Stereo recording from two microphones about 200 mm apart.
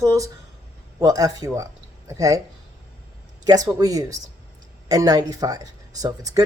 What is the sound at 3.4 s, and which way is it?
A woman's voice, 20° right (ahead or behind).